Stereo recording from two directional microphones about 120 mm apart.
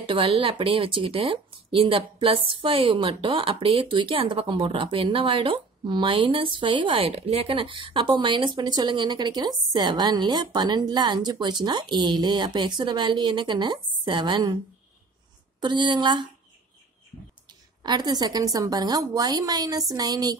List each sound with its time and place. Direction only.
0.0 s speech: 45° right (ahead or behind)
15.6 s a woman's voice: 40° right (ahead or behind)
17.5 s a woman's voice: 35° right (ahead or behind)